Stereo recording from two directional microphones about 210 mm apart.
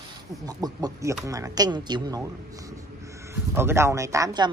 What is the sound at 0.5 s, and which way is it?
A man's voice, 20° right (ahead or behind).